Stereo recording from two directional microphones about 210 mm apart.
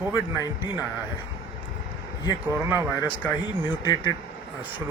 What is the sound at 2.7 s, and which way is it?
Speech, 5° right (ahead or behind).